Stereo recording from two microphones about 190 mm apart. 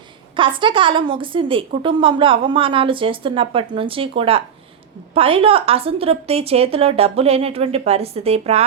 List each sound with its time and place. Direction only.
0.3 s a woman's voice: 25° right (ahead or behind)